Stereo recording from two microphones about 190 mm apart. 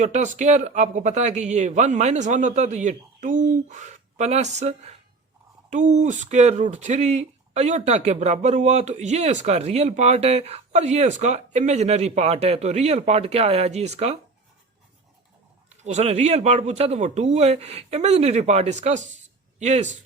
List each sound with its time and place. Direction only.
0.0 s speech: 40° right (ahead or behind)
15.8 s speech: 35° right (ahead or behind)